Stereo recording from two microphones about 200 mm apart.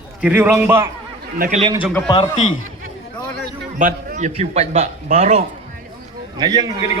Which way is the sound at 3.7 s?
40° right (ahead or behind).